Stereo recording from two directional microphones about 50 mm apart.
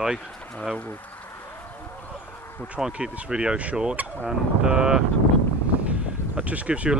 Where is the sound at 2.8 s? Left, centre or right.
Centre.